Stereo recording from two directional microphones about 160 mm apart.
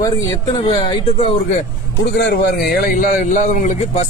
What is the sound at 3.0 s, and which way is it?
A man's voice, 50° left (ahead or behind).